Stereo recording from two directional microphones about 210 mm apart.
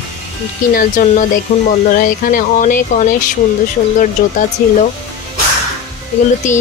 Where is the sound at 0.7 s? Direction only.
40° left (ahead or behind).